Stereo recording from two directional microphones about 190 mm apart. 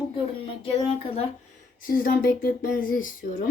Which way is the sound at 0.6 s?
30° left (ahead or behind).